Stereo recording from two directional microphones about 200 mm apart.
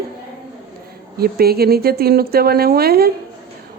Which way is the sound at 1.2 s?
50° right (ahead or behind).